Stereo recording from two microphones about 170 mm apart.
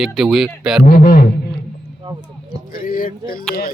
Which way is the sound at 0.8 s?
60° left (ahead or behind).